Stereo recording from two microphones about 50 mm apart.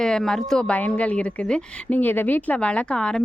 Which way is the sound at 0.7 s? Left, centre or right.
Left.